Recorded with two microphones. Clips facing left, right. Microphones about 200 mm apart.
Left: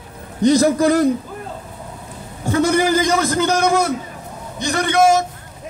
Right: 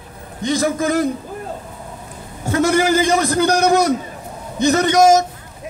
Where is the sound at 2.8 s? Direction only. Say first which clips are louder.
Right 1 dB; 25° right (ahead or behind).